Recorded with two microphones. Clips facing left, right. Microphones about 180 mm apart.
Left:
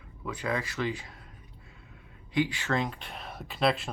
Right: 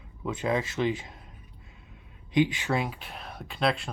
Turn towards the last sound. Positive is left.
turn(degrees=0)  # may be behind; listen again after turning